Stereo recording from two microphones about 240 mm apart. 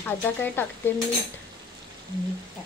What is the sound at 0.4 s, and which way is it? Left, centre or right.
Speech, centre.